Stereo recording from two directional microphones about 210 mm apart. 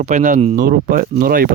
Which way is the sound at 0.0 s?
35° right (ahead or behind).